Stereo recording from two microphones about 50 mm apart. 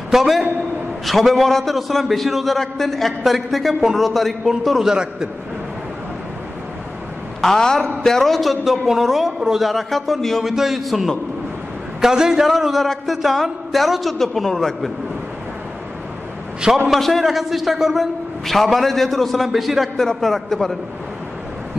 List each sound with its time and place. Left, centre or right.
0.1 s a man's voice: centre
7.4 s a man's voice: centre
10.4 s a man's voice: centre
12.0 s a man's voice: centre
16.9 s a man's voice: centre